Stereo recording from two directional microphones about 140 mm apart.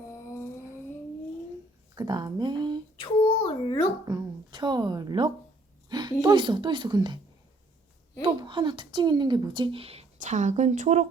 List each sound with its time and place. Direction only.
2.0 s speech: 30° right (ahead or behind)
3.0 s a sound: 35° left (ahead or behind)
4.0 s speech: 25° right (ahead or behind)
5.9 s a sound: 30° right (ahead or behind)
6.2 s speech: 35° right (ahead or behind)
8.2 s speech: 35° right (ahead or behind); by 11.0 s 55° right (ahead or behind)